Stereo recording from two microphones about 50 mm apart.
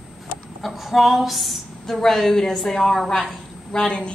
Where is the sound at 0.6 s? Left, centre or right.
Centre.